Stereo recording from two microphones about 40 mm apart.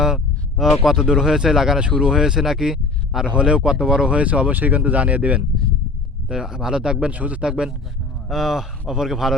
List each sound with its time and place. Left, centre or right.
0.6 s speech: centre
3.2 s speech: right
4.1 s speech: right
6.2 s speech: centre
7.1 s speech: right
7.4 s speech: right
8.3 s speech: centre